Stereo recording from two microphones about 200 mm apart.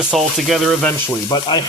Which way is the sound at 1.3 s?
20° left (ahead or behind).